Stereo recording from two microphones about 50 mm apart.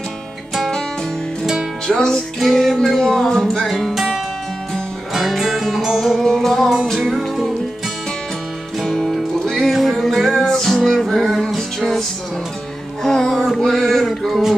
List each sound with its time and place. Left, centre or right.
0.6 s music: centre
1.4 s music: centre
1.9 s music: centre
2.4 s music: centre
6.2 s music: centre
8.8 s music: centre
13.0 s music: centre
13.8 s male singing: centre